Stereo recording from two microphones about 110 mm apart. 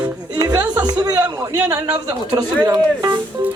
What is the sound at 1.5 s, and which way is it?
A man's voice, 25° right (ahead or behind).